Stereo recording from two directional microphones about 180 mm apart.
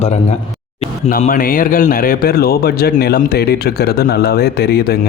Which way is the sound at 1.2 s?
50° left (ahead or behind).